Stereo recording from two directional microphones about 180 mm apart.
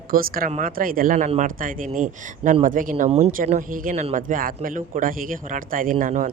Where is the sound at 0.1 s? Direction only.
55° right (ahead or behind).